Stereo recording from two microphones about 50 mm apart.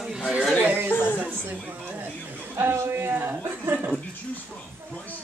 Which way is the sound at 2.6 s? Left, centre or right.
Right.